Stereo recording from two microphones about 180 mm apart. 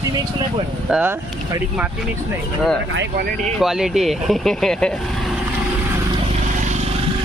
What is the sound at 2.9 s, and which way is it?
Speech, 55° right (ahead or behind).